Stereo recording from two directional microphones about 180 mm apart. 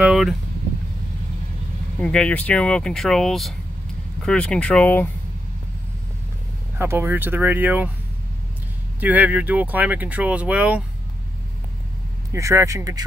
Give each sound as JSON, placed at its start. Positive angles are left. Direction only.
{"t": 0.0, "sound": "speech", "side_deg": 0}
{"t": 2.0, "sound": "speech", "side_deg": 5}
{"t": 6.8, "sound": "speech", "side_deg": -10}
{"t": 9.0, "sound": "speech", "side_deg": -10}
{"t": 12.3, "sound": "speech", "side_deg": -15}